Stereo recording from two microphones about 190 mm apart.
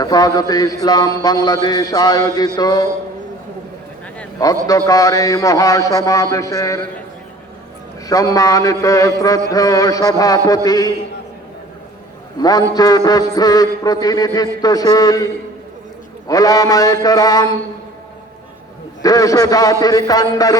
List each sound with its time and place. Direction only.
0.0 s a man's voice: 20° left (ahead or behind)
4.4 s a man's voice: 20° left (ahead or behind)
4.9 s a sound: 20° left (ahead or behind)
8.0 s a man's voice: 20° left (ahead or behind)
12.4 s a man's voice: 20° left (ahead or behind)
16.3 s a man's voice: 20° left (ahead or behind)
19.0 s a man's voice: 20° left (ahead or behind)